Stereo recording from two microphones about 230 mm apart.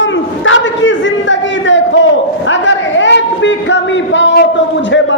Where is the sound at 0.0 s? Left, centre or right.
Left.